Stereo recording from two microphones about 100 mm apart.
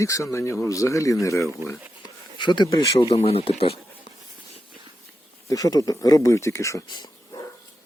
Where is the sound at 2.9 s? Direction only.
85° left.